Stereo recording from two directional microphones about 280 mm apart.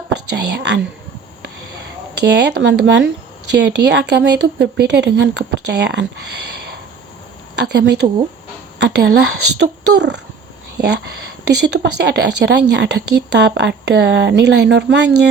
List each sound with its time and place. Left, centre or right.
0.3 s speech: right
2.1 s speech: right
7.7 s speech: right
11.4 s speech: right